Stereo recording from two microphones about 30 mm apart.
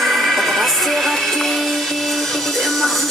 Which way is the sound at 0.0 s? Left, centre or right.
Centre.